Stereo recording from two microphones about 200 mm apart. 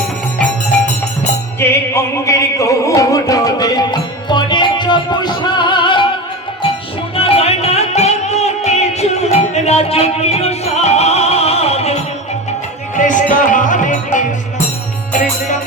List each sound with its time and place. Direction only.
1.5 s music: 10° left (ahead or behind)
7.2 s music: 30° left (ahead or behind)
13.0 s music: 40° left (ahead or behind)